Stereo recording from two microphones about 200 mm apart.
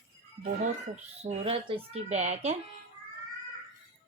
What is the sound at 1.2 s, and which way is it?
Speech, 30° right (ahead or behind).